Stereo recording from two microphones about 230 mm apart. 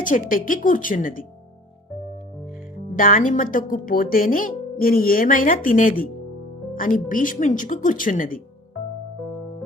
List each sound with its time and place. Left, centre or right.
0.0 s speech: left
2.9 s speech: left